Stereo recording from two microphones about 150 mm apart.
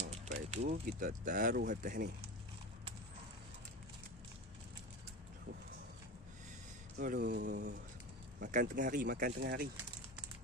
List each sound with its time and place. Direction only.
0.1 s a sound: 50° right (ahead or behind)
0.8 s speech: 65° right (ahead or behind)
7.0 s speech: 80° right
8.4 s speech: 60° right (ahead or behind); by 9.7 s 75° right (ahead or behind)